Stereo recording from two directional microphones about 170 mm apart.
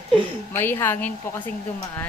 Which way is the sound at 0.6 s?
15° left (ahead or behind).